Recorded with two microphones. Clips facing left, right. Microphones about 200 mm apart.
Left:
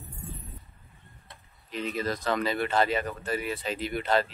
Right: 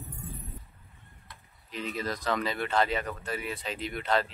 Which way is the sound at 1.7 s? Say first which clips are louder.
Left 3 dB; centre (ahead or behind).